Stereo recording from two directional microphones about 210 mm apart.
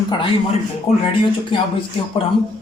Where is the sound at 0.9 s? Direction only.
30° left (ahead or behind).